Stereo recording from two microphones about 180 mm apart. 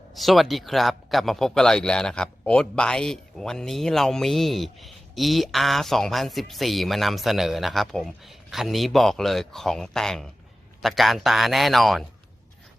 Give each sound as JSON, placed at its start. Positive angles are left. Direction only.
{"t": 0.1, "sound": "speech", "side_deg": 0}